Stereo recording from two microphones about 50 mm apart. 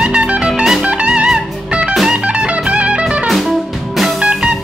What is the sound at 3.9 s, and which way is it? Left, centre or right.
Music, centre.